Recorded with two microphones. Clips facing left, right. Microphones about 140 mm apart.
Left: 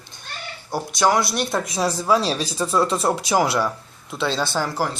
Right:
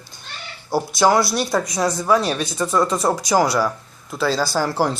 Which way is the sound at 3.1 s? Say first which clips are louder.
Right 2 dB; 10° right (ahead or behind).